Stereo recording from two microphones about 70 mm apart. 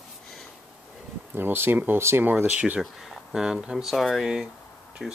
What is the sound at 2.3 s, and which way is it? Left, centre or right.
Speech, right.